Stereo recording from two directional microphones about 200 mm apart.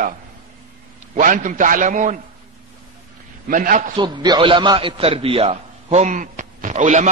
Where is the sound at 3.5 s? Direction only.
40° right (ahead or behind).